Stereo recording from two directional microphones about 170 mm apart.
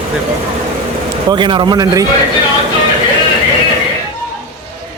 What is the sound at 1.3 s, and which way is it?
Speech, 30° right (ahead or behind).